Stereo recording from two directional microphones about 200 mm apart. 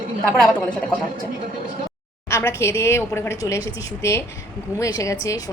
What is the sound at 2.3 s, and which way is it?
A woman's voice, 10° left (ahead or behind).